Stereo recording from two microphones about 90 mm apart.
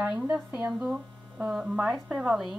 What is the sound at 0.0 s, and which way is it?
Speech, 15° right (ahead or behind).